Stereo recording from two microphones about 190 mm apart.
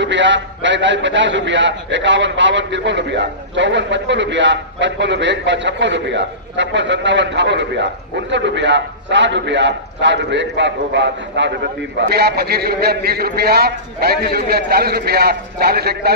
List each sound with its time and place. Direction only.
0.0 s a man's voice: 70° right (ahead or behind)
12.0 s a man's voice: 55° right (ahead or behind)